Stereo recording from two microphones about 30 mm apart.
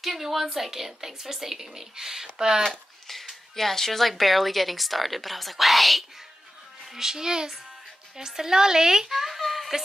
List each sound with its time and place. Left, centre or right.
0.0 s a woman's voice: centre
2.3 s a child's voice: right
3.1 s a woman's voice: centre
7.0 s a child's voice: centre
9.4 s a sound: centre